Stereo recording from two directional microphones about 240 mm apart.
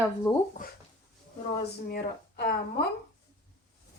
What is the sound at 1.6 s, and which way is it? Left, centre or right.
Speech, left.